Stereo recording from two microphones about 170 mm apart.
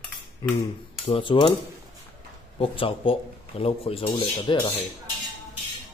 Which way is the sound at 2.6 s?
30° left (ahead or behind).